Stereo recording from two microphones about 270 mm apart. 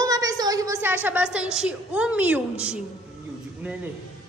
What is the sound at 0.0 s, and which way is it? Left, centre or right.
A woman's voice, centre.